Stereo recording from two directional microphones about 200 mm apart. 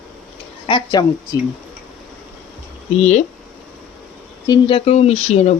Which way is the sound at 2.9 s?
35° left (ahead or behind).